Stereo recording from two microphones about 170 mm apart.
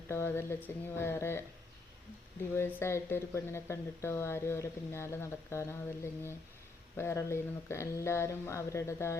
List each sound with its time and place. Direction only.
0.1 s speech: 15° left (ahead or behind)
2.6 s speech: 15° left (ahead or behind)